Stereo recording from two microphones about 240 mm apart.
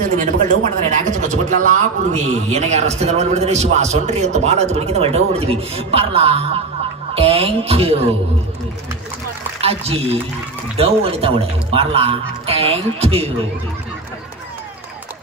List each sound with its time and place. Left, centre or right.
0.0 s a man's voice: right
9.6 s a man's voice: right